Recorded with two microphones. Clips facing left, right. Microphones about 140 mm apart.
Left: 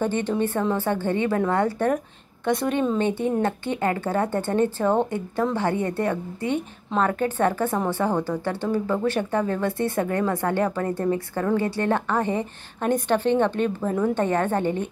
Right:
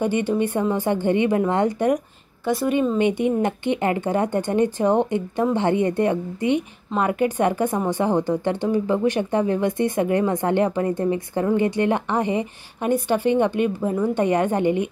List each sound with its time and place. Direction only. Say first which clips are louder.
0.0 s speech: right 2 dB; 10° right (ahead or behind)
2.4 s a woman's voice: right 2 dB; 5° right (ahead or behind)